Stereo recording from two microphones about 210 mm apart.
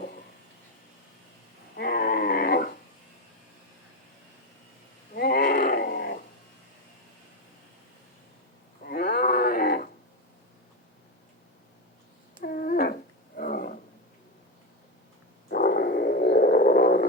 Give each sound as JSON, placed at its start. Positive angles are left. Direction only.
{"t": 1.7, "sound": "a sound", "side_deg": 45}
{"t": 5.1, "sound": "wild animals", "side_deg": 50}
{"t": 8.8, "sound": "a sound", "side_deg": 45}
{"t": 12.4, "sound": "cat", "side_deg": 40}
{"t": 13.3, "sound": "roaring cats", "side_deg": 45}
{"t": 15.4, "sound": "dog", "side_deg": 50}